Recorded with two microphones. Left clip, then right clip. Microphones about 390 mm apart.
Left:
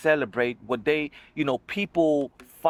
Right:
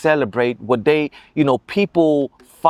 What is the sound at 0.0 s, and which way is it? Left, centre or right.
Speech, right.